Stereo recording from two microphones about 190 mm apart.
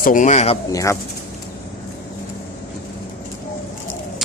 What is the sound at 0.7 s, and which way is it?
Speech, 15° left (ahead or behind).